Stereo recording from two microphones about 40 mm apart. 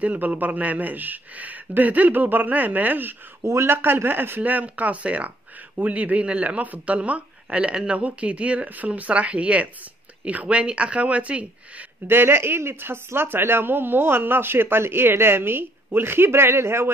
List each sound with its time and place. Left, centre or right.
0.0 s speech: right
3.6 s speech: right
4.4 s speech: right
12.1 s speech: right